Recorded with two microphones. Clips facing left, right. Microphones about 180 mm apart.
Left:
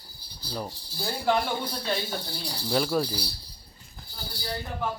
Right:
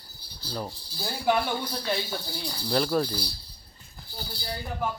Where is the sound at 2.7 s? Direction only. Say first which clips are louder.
Right 1 dB; 5° left (ahead or behind).